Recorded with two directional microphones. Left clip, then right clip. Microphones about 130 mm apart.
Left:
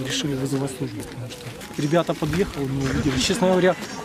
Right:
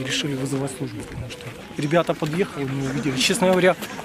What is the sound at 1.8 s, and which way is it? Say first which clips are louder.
Speech: right 1 dB; centre (ahead or behind).